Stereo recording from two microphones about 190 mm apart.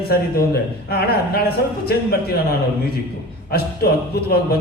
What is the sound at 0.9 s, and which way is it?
A man's voice, 55° left (ahead or behind).